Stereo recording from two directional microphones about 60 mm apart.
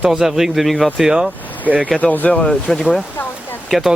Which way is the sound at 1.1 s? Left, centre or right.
Centre.